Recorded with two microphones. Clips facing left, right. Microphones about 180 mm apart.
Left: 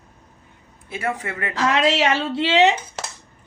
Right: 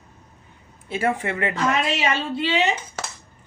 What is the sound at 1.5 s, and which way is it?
A woman's voice, 80° left.